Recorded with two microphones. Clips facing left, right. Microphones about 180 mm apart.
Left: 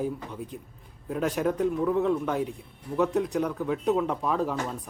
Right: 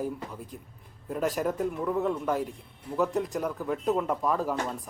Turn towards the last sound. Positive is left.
turn(degrees=0)  # may be behind; listen again after turning